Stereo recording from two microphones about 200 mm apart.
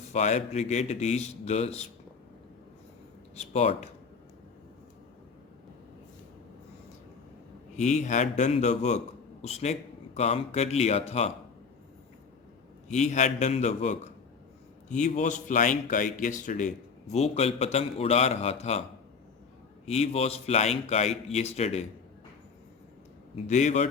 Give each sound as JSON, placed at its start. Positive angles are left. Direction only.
{"t": 0.1, "sound": "a man's voice", "side_deg": 35}
{"t": 3.3, "sound": "a man's voice", "side_deg": 30}
{"t": 7.8, "sound": "a man's voice", "side_deg": 35}
{"t": 12.9, "sound": "a man's voice", "side_deg": 35}
{"t": 23.3, "sound": "a man's voice", "side_deg": 35}